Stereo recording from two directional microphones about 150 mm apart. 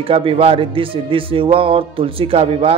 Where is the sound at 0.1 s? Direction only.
40° right (ahead or behind).